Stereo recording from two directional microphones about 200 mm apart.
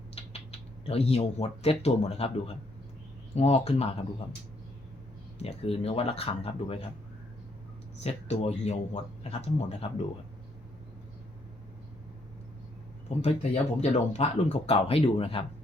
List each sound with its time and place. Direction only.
0.2 s mechanisms: 30° left (ahead or behind)
0.9 s speech: 30° left (ahead or behind)
3.3 s speech: 30° left (ahead or behind)
5.4 s speech: 30° left (ahead or behind)
8.0 s speech: 30° left (ahead or behind)
13.1 s speech: 35° left (ahead or behind)